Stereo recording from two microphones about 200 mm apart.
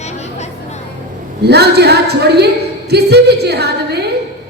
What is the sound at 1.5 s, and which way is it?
A woman's voice, 55° right (ahead or behind).